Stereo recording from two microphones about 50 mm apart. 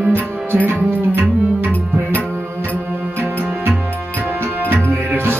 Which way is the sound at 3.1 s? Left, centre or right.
Right.